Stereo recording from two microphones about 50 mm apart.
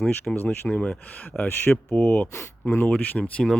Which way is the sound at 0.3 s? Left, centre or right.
Centre.